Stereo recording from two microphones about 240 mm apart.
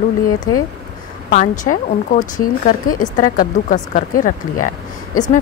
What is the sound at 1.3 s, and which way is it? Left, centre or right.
Speech, left.